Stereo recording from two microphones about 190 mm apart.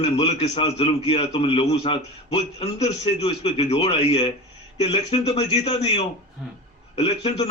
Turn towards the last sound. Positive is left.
turn(degrees=30)  # may be behind; listen again after turning